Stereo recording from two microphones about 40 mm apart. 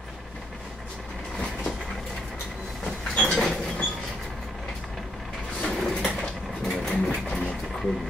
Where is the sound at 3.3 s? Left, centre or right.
Centre.